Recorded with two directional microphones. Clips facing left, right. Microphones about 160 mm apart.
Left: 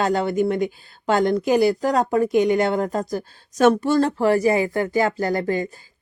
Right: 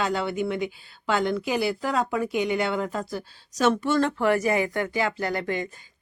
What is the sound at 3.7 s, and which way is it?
Speech, 35° left (ahead or behind).